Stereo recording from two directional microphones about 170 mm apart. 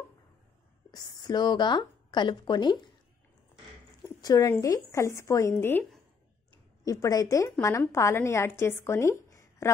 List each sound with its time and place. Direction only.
0.9 s speech: 25° left (ahead or behind)
4.2 s a woman's voice: 20° left (ahead or behind)